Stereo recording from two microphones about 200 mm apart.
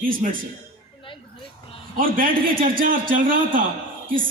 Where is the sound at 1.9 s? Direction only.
45° right (ahead or behind).